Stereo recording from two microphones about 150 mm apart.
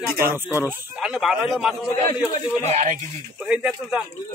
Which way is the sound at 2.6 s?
55° right (ahead or behind).